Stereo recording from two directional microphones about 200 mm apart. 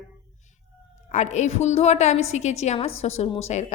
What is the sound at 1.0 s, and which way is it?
A woman's voice, 35° left (ahead or behind).